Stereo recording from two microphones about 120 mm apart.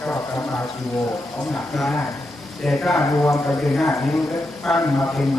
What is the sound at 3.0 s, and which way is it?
A man's voice, 20° left (ahead or behind).